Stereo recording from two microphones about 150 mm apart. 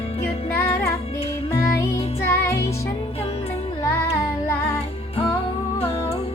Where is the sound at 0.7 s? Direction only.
20° left (ahead or behind).